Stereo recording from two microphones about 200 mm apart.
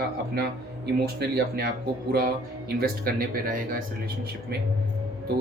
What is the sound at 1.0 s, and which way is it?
A man's voice, 50° right (ahead or behind).